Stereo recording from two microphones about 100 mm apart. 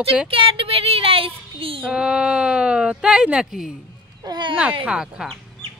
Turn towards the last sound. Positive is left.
turn(degrees=-5)  # may be behind; listen again after turning